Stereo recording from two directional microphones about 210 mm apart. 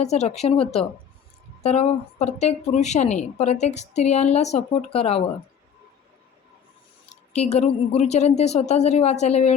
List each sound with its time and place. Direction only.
0.0 s a woman's voice: 30° left (ahead or behind)
7.3 s a woman's voice: 30° left (ahead or behind)